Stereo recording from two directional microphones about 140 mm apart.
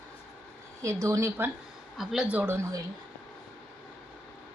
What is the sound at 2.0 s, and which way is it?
Speech, 5° right (ahead or behind).